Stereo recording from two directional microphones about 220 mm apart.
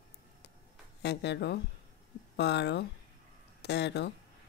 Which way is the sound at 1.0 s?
50° left (ahead or behind).